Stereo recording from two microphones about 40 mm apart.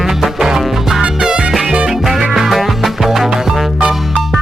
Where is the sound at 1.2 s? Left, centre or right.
Right.